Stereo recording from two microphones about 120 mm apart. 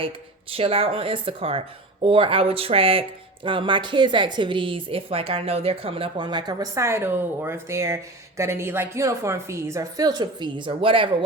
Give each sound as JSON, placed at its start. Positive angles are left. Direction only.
{"t": 0.5, "sound": "a woman's voice", "side_deg": -50}